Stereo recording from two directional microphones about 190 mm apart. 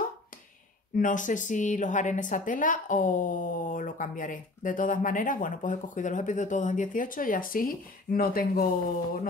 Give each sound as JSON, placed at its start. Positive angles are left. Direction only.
{"t": 0.9, "sound": "a woman's voice", "side_deg": 45}